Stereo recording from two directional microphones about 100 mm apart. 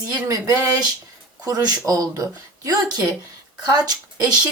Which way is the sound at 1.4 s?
40° right (ahead or behind).